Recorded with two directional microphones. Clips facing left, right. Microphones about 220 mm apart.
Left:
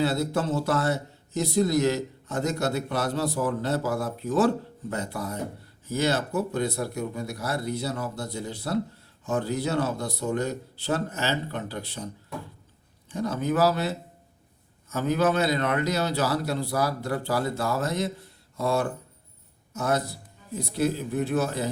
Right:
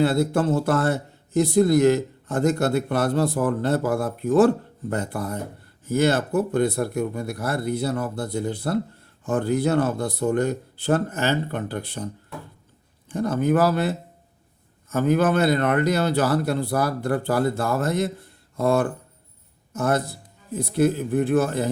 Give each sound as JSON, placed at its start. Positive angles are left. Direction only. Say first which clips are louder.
{"t": 0.0, "sound": "speech", "louder": "right 5 dB", "side_deg": -55}
{"t": 13.1, "sound": "speech", "louder": "right 5 dB", "side_deg": -50}